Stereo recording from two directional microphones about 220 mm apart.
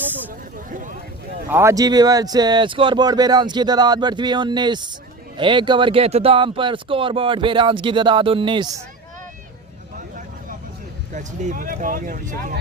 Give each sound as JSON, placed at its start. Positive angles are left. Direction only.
{"t": 0.7, "sound": "vehicle", "side_deg": -35}
{"t": 1.5, "sound": "speech", "side_deg": -10}
{"t": 11.1, "sound": "speech", "side_deg": -35}